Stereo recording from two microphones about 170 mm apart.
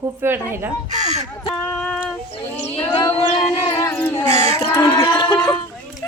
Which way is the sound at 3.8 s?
15° left (ahead or behind).